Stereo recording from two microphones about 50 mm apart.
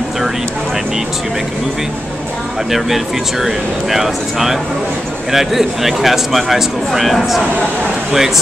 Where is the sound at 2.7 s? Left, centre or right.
Centre.